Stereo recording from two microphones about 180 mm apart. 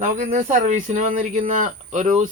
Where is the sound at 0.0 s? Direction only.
45° right (ahead or behind).